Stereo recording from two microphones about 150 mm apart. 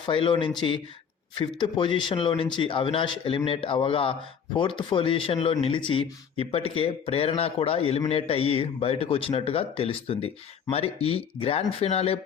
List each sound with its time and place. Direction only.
0.0 s speech: 35° left (ahead or behind)